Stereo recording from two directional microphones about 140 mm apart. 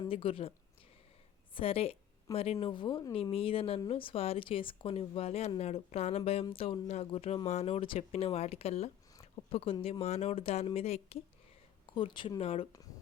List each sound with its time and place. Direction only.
0.1 s speech: 40° left (ahead or behind)
1.5 s speech: 40° left (ahead or behind)
11.9 s speech: 35° left (ahead or behind)